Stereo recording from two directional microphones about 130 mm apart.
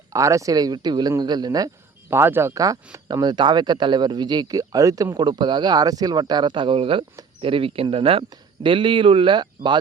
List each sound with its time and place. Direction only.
0.1 s speech: 25° right (ahead or behind)